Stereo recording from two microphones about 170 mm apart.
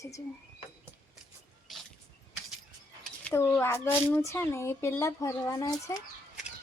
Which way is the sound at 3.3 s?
15° left (ahead or behind).